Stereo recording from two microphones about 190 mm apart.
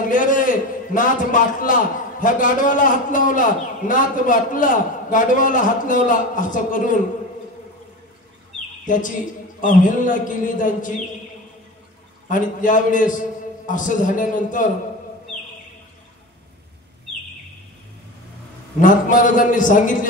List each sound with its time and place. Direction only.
0.1 s a man's voice: 45° left (ahead or behind)
8.8 s a woman's voice: 45° left (ahead or behind)
12.3 s a man's voice: 45° left (ahead or behind)
18.8 s a man's voice: 45° left (ahead or behind)